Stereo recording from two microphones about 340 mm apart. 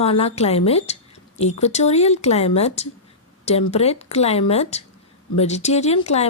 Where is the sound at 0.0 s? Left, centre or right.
Centre.